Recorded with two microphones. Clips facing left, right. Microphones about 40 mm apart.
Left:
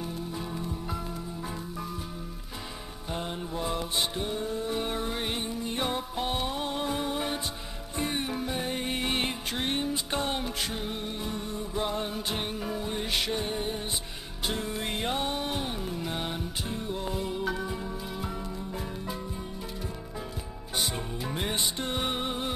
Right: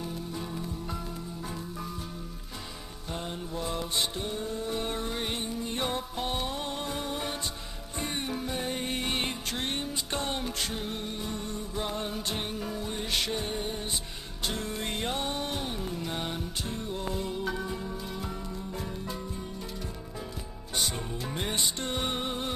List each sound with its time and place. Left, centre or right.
0.0 s music: centre
3.1 s mantra: centre
8.0 s music: centre
20.8 s music: centre